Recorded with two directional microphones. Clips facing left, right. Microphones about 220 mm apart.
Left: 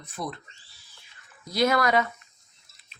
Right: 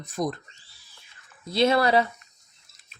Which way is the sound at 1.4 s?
25° right (ahead or behind).